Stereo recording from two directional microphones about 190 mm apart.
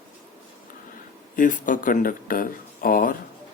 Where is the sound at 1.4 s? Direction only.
45° left (ahead or behind).